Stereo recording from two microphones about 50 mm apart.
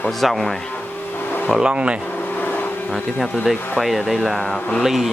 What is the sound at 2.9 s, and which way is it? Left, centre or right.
Speech, centre.